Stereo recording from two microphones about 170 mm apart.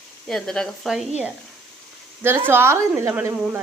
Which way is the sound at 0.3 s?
5° left (ahead or behind).